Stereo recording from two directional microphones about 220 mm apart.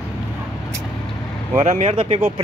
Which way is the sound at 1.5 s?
30° right (ahead or behind).